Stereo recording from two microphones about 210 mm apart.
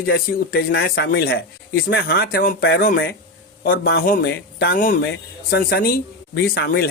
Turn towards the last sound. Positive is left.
turn(degrees=50)  # may be behind; listen again after turning